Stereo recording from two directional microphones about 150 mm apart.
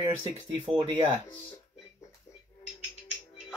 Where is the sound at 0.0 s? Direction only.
35° right (ahead or behind).